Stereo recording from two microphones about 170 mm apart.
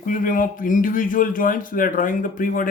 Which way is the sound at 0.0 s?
55° left (ahead or behind).